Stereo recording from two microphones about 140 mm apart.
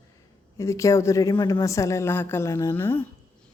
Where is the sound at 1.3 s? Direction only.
35° left (ahead or behind).